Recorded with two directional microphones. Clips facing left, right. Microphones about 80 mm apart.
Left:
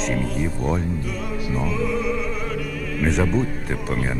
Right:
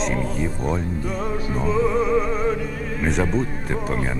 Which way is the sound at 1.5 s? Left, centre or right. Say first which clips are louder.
Right 3 dB; right.